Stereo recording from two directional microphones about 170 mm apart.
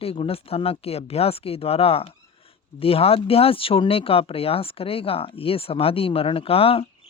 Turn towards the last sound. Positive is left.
turn(degrees=35)  # may be behind; listen again after turning